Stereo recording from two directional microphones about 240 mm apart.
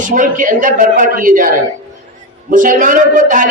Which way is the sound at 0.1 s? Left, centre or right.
Right.